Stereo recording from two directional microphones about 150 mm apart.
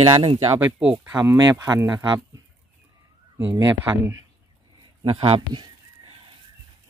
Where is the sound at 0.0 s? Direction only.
30° right (ahead or behind).